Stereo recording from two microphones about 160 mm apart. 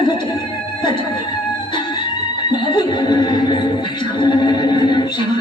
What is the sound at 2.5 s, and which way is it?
Music, 30° left (ahead or behind).